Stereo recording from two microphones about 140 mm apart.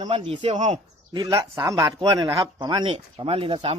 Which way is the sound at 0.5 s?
60° right (ahead or behind).